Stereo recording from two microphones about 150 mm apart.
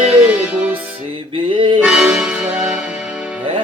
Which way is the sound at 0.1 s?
10° right (ahead or behind).